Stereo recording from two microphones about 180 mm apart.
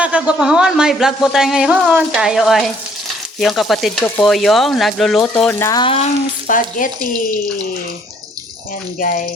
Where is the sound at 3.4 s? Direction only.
Centre (ahead or behind).